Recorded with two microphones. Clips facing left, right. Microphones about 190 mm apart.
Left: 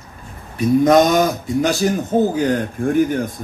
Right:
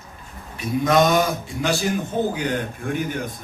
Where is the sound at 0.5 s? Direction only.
45° left (ahead or behind).